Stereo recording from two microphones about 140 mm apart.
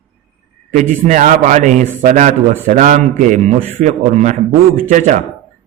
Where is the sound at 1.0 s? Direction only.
65° right (ahead or behind).